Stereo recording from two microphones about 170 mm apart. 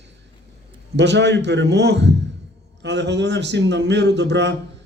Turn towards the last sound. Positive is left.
turn(degrees=-90)